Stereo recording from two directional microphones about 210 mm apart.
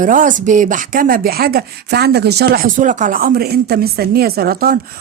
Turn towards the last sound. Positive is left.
turn(degrees=-45)  # may be behind; listen again after turning